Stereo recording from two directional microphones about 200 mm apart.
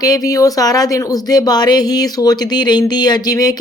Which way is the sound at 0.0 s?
20° left (ahead or behind).